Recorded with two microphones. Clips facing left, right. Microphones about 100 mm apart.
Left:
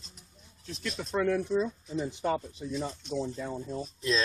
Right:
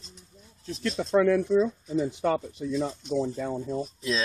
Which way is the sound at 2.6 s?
75° right (ahead or behind).